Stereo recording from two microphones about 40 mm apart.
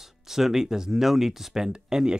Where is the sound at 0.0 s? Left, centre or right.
Centre.